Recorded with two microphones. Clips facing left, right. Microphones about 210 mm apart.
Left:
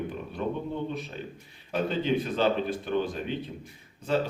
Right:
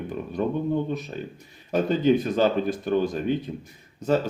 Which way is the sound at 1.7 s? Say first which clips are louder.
Right 6 dB; 40° right (ahead or behind).